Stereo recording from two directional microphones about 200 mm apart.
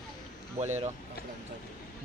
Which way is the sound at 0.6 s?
35° right (ahead or behind).